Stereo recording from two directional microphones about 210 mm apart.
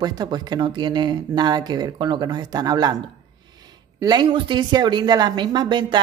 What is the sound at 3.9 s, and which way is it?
Speech, 20° right (ahead or behind).